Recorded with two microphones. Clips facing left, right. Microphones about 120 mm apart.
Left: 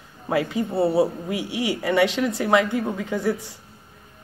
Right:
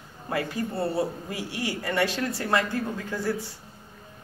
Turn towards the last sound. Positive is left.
turn(degrees=20)  # may be behind; listen again after turning